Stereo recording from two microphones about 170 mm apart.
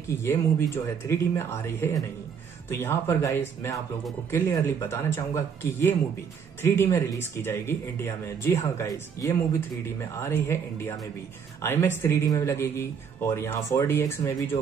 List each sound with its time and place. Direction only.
0.1 s speech: 15° left (ahead or behind)